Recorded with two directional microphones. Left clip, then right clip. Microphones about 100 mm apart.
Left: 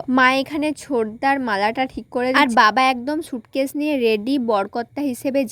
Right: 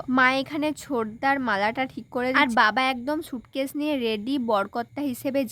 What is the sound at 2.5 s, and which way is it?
Speech, 45° left (ahead or behind).